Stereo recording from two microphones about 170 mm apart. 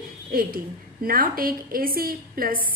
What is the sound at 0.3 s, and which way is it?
A woman's voice, 60° right (ahead or behind).